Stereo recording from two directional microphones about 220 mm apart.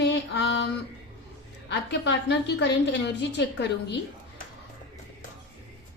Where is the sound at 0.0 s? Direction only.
55° left (ahead or behind).